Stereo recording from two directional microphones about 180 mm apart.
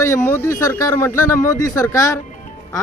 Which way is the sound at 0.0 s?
10° left (ahead or behind).